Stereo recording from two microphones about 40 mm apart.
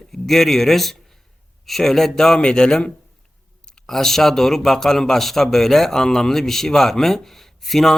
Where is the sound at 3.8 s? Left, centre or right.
Centre.